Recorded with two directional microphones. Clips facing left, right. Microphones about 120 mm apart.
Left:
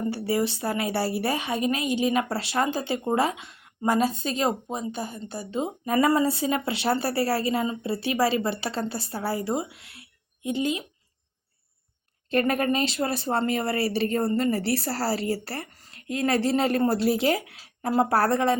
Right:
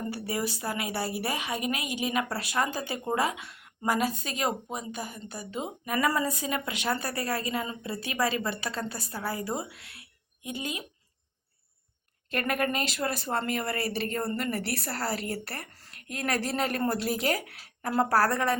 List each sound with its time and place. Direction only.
0.1 s a woman's voice: 25° left (ahead or behind)
12.3 s a woman's voice: 30° left (ahead or behind)
15.7 s a sound: 20° left (ahead or behind)
16.2 s a woman's voice: 25° left (ahead or behind)